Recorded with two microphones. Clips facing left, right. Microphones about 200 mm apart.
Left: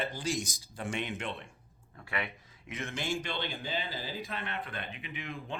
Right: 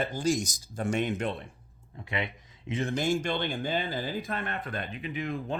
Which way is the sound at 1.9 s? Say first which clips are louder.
Right 4 dB; 20° right (ahead or behind).